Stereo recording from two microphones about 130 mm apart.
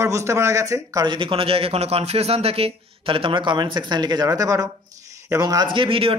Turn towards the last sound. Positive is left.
turn(degrees=-45)  # may be behind; listen again after turning